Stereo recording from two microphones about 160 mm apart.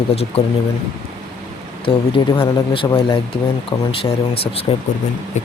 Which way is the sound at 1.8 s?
35° left (ahead or behind).